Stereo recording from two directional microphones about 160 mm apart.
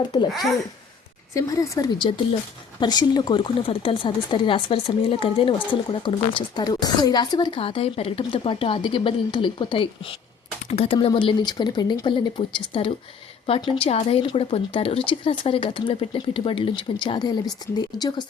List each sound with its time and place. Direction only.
0.0 s speech: 25° left (ahead or behind)